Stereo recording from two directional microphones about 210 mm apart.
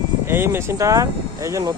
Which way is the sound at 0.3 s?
10° right (ahead or behind).